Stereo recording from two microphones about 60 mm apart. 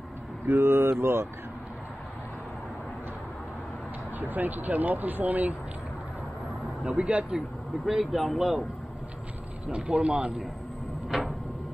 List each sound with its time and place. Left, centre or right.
0.5 s speech: right
4.2 s speech: right
6.8 s speech: centre
7.3 s speech: centre
9.7 s speech: centre